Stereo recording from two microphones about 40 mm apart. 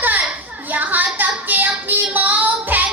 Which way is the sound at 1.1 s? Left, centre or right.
Right.